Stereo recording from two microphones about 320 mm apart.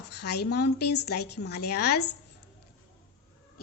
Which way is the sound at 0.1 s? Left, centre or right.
Left.